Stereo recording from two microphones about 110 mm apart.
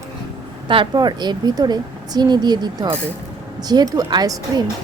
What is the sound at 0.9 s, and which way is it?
Speech, 40° right (ahead or behind).